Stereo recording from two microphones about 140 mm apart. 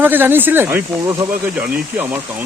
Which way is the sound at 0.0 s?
15° right (ahead or behind).